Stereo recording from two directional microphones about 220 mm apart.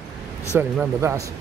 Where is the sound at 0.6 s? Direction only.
10° right (ahead or behind).